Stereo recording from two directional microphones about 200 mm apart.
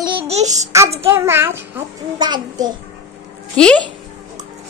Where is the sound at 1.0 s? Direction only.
10° right (ahead or behind).